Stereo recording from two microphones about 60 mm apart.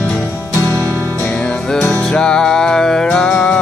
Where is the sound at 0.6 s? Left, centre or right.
Right.